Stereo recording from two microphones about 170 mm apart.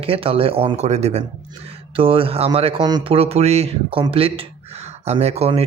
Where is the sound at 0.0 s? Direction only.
35° right (ahead or behind).